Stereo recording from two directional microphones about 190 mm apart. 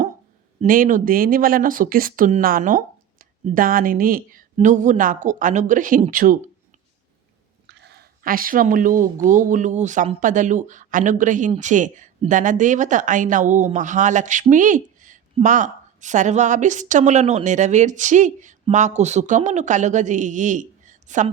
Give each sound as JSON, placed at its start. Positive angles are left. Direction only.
{"t": 0.6, "sound": "speech", "side_deg": -45}
{"t": 7.7, "sound": "a sound", "side_deg": -65}
{"t": 9.3, "sound": "speech", "side_deg": -45}